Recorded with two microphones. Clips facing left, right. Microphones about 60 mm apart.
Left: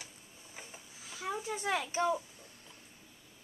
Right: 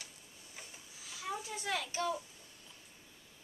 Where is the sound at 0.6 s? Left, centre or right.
Left.